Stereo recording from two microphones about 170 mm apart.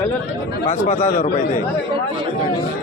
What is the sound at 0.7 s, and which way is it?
Speech, 45° left (ahead or behind).